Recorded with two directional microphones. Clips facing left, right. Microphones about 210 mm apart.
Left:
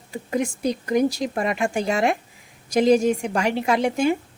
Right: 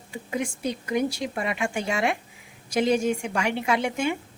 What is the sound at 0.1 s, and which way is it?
Speech, 40° left (ahead or behind).